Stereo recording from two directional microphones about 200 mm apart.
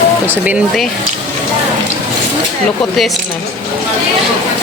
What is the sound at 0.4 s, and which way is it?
Speech, 5° right (ahead or behind).